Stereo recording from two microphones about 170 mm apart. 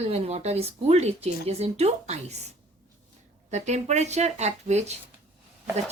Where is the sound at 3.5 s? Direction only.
40° right (ahead or behind).